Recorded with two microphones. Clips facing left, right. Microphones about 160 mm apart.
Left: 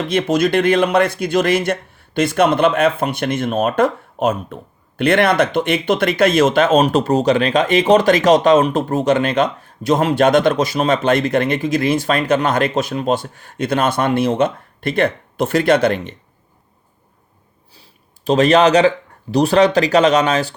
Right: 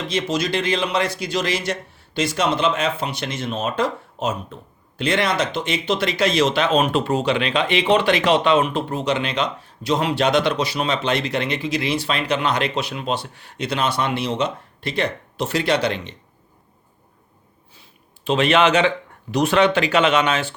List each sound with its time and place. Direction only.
0.0 s speech: 55° left (ahead or behind)
18.3 s speech: 40° left (ahead or behind)